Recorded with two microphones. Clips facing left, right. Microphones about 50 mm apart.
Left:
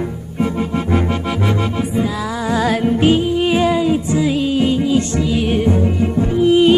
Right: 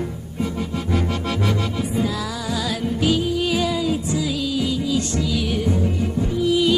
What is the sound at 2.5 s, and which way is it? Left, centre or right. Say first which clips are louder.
Music: left 10 dB; left.